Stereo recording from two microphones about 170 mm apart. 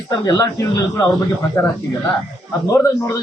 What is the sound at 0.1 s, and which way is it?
A man's voice, 25° left (ahead or behind).